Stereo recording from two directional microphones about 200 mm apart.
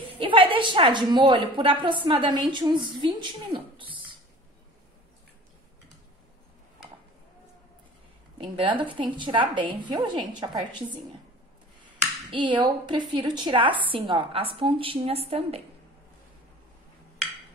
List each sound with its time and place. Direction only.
0.2 s a woman's voice: 25° right (ahead or behind)
8.4 s a woman's voice: 25° right (ahead or behind)
12.3 s a woman's voice: 25° right (ahead or behind)